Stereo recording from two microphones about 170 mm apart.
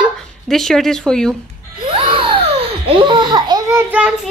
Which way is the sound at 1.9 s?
30° right (ahead or behind).